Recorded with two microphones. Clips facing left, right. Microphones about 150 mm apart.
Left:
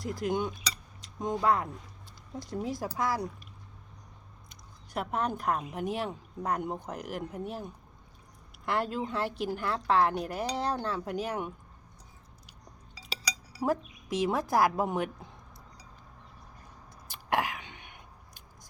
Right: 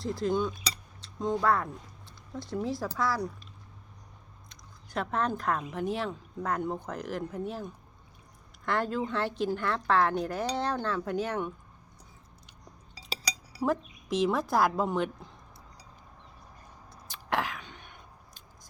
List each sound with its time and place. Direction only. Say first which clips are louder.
0.0 s speech: right 2 dB; 15° left (ahead or behind)
2.8 s speech: right 1 dB; 15° left (ahead or behind)
4.9 s speech: right 1 dB; 10° left (ahead or behind)
13.6 s speech: right 1 dB; 10° left (ahead or behind)
16.9 s throat clearing: left 1 dB; 15° left (ahead or behind)